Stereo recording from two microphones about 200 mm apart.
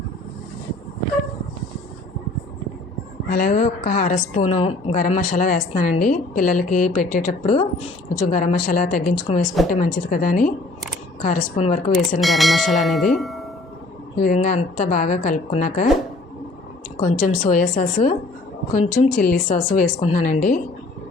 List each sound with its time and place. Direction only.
3.2 s a woman's voice: 45° left (ahead or behind)
12.2 s speech: centre (ahead or behind)
14.2 s a woman's voice: 40° left (ahead or behind)
17.0 s a woman's voice: 40° left (ahead or behind)